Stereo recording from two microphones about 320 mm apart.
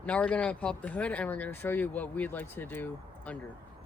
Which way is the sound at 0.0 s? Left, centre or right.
Centre.